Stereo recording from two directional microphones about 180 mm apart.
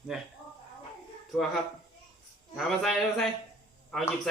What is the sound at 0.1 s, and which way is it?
Speech, 5° right (ahead or behind).